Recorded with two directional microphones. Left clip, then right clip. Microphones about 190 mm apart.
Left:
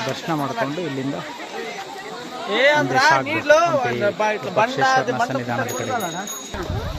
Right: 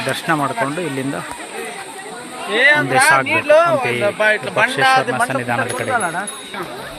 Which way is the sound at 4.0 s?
50° left (ahead or behind).